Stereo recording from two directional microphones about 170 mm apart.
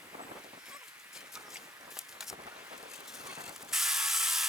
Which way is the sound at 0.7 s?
5° right (ahead or behind).